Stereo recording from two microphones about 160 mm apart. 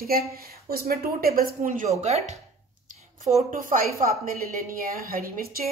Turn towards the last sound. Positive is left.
turn(degrees=-65)  # may be behind; listen again after turning